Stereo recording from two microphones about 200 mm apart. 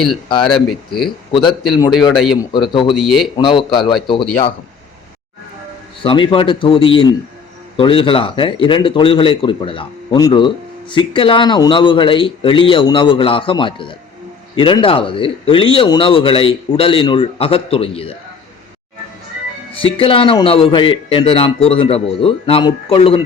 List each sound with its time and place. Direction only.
0.3 s a man's voice: 20° left (ahead or behind)
2.1 s a man's voice: centre (ahead or behind)
2.4 s a man's voice: 25° left (ahead or behind)
2.9 s a man's voice: centre (ahead or behind)
3.3 s a man's voice: 25° left (ahead or behind)
6.0 s a man's voice: 25° left (ahead or behind)
19.8 s a man's voice: 25° left (ahead or behind)